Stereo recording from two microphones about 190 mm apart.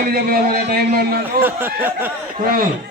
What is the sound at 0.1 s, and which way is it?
Speech, 50° right (ahead or behind).